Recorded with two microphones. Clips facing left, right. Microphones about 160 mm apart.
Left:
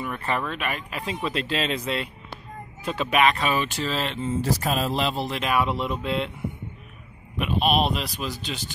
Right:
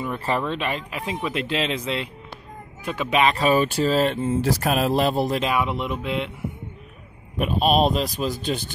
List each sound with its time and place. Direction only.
0.0 s speech: 30° right (ahead or behind)
0.8 s speech: 15° right (ahead or behind)
3.1 s speech: 35° right (ahead or behind)
4.4 s speech: 60° right (ahead or behind)
5.5 s speech: 15° right (ahead or behind)
7.3 s speech: 40° right (ahead or behind)